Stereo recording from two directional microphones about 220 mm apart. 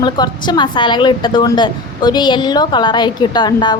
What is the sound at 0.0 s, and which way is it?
A woman's voice, 20° left (ahead or behind).